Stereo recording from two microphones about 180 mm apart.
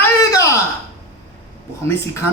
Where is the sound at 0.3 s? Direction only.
20° left (ahead or behind).